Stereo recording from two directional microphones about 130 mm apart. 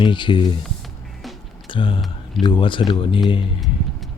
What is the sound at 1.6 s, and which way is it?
Speech, 40° left (ahead or behind).